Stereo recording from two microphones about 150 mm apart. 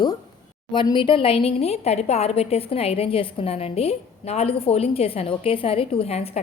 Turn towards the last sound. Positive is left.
turn(degrees=40)  # may be behind; listen again after turning